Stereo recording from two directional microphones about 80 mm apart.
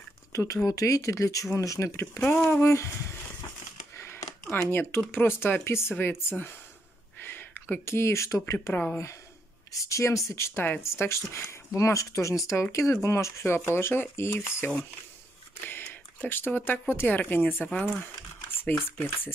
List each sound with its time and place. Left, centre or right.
0.3 s speech: left
3.9 s a sound: left
4.6 s speech: left
7.2 s a sound: left
7.8 s speech: left
8.7 s speech: left
9.7 s speech: left
10.5 s speech: left
15.6 s a sound: left
16.9 s speech: left